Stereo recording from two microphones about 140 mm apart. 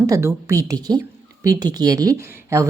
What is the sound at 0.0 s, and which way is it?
A woman's voice, 20° right (ahead or behind).